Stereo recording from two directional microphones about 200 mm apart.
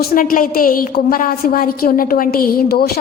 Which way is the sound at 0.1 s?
45° left (ahead or behind).